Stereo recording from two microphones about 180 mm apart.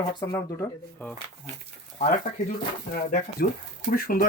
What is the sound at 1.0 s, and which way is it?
Speech, 10° left (ahead or behind).